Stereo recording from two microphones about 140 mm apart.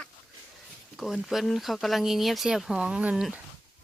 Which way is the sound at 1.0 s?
Centre (ahead or behind).